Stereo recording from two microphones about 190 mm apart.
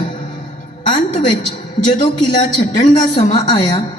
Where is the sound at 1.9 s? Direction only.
25° left (ahead or behind).